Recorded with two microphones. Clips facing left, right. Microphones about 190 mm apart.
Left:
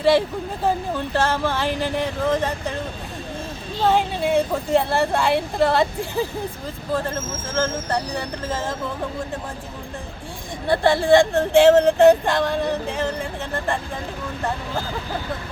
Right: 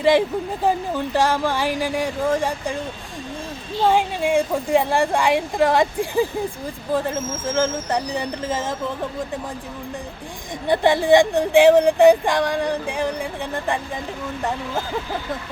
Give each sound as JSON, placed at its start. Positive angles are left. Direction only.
{"t": 0.6, "sound": "speech", "side_deg": -15}
{"t": 3.8, "sound": "speech", "side_deg": -10}
{"t": 7.5, "sound": "speech", "side_deg": -15}
{"t": 10.7, "sound": "speech", "side_deg": -20}